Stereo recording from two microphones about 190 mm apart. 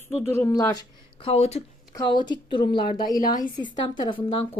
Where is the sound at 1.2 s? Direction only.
35° left (ahead or behind).